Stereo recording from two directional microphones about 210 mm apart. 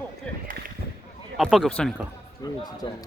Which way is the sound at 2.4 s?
20° left (ahead or behind).